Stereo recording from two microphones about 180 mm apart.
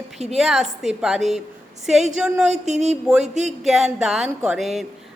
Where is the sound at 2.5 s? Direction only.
40° right (ahead or behind).